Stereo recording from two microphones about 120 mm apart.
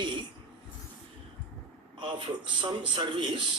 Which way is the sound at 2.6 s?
40° right (ahead or behind).